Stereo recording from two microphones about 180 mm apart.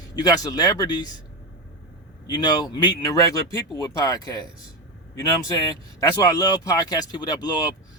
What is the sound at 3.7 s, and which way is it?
Speech, 20° left (ahead or behind).